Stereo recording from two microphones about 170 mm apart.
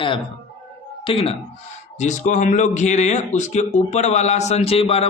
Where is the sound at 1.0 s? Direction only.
35° left (ahead or behind).